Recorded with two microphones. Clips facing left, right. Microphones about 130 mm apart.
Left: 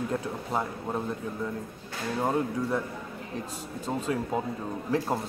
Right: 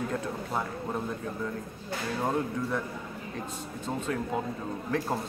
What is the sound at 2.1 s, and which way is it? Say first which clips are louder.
Speech: left 3 dB; 15° left (ahead or behind).